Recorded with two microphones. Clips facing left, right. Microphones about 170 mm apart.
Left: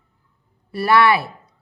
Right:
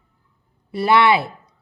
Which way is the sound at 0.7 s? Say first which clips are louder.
Even; 20° right (ahead or behind).